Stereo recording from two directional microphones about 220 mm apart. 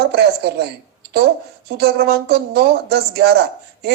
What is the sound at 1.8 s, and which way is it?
Speech, 50° right (ahead or behind).